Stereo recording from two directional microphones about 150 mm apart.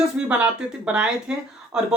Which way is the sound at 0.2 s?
10° right (ahead or behind).